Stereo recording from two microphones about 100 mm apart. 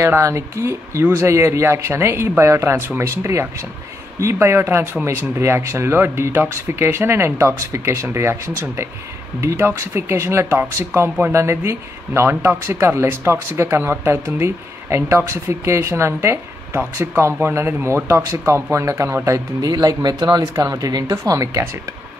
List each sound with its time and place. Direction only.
0.0 s speech: 25° right (ahead or behind)